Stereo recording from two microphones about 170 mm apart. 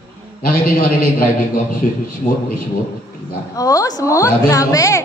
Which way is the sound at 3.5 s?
20° left (ahead or behind).